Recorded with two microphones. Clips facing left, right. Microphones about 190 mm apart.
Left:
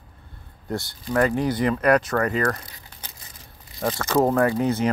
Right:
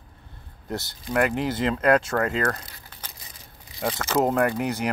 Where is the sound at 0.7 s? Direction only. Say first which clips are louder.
Left 3 dB; 20° right (ahead or behind).